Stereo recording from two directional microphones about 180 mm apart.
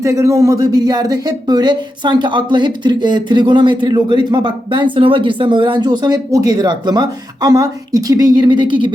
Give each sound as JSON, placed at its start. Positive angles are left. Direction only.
{"t": 0.0, "sound": "speech", "side_deg": -15}